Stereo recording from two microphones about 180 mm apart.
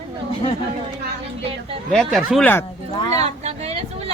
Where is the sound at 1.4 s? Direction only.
30° right (ahead or behind).